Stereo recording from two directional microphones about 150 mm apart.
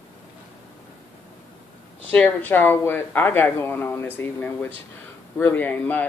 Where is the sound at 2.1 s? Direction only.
10° left (ahead or behind).